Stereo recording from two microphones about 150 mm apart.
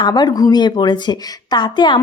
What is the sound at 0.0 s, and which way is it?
A woman's voice, 25° left (ahead or behind).